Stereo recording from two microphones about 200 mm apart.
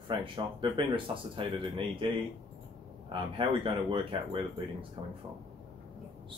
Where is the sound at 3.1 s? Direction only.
25° right (ahead or behind).